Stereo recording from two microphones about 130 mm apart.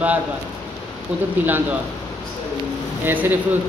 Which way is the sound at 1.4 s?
15° right (ahead or behind).